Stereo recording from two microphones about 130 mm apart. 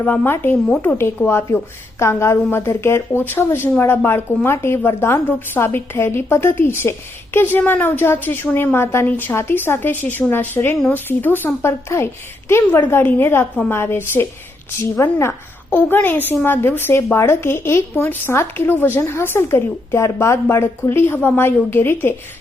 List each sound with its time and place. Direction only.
0.0 s a woman's voice: 15° left (ahead or behind)